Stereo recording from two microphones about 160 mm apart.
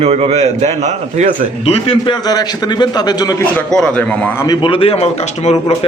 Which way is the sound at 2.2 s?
25° left (ahead or behind).